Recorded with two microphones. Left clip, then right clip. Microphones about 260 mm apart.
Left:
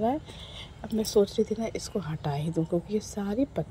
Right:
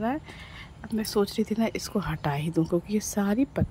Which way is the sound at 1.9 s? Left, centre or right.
Right.